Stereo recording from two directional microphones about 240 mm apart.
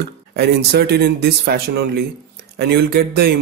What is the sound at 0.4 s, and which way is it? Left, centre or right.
Speech, right.